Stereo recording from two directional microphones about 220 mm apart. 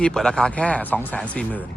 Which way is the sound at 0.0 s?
5° left (ahead or behind).